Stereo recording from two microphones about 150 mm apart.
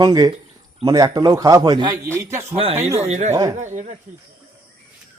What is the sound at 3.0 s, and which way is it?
Speech, 50° right (ahead or behind).